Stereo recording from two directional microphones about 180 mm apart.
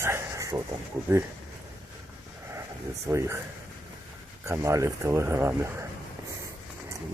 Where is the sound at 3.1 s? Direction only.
15° right (ahead or behind).